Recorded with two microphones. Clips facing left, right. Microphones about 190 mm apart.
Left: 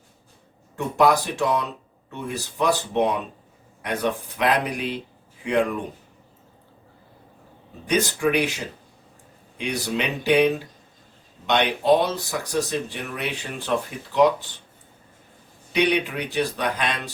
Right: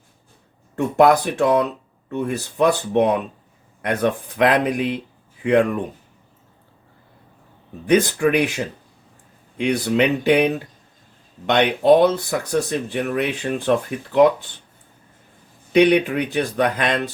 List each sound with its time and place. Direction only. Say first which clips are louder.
0.9 s speech: right 4 dB; 60° right (ahead or behind)
8.0 s speech: right 4 dB; 55° right (ahead or behind)
11.4 s speech: right 5 dB; 55° right (ahead or behind)
15.7 s speech: right 7 dB; 55° right (ahead or behind)